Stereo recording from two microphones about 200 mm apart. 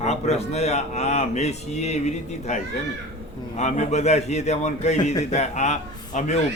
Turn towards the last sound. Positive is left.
turn(degrees=35)  # may be behind; listen again after turning